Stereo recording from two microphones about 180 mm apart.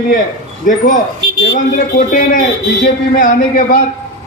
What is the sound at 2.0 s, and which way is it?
A man's voice, 50° left (ahead or behind).